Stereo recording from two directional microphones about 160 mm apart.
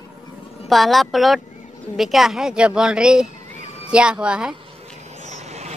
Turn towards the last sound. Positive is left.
turn(degrees=-45)  # may be behind; listen again after turning